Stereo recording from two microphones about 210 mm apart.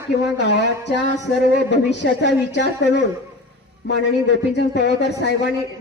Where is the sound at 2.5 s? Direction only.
55° left (ahead or behind).